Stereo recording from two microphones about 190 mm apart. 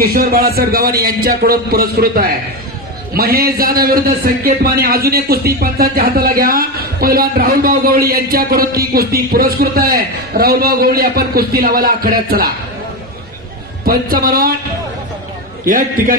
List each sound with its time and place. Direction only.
0.0 s a man's voice: 50° right (ahead or behind)
13.8 s a man's voice: 50° right (ahead or behind)
15.6 s a man's voice: 45° right (ahead or behind)